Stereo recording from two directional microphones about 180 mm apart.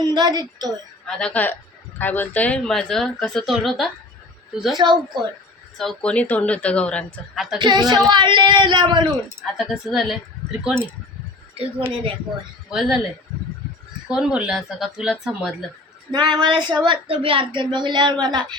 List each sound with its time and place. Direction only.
0.0 s a woman's voice: 25° right (ahead or behind)
1.0 s speech: 5° left (ahead or behind)
4.8 s a woman's voice: 25° right (ahead or behind)
5.7 s speech: centre (ahead or behind)
7.6 s a woman's voice: 25° right (ahead or behind)
9.0 s speech: centre (ahead or behind)
12.7 s speech: centre (ahead or behind)
14.1 s speech: 5° right (ahead or behind)
16.1 s a woman's voice: 25° right (ahead or behind)